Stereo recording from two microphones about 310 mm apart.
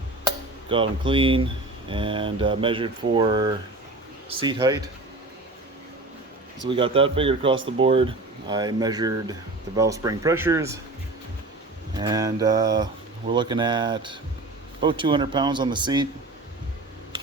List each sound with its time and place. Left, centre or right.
0.3 s cutlery: centre
1.9 s speech: centre
6.7 s speech: centre
11.9 s speech: centre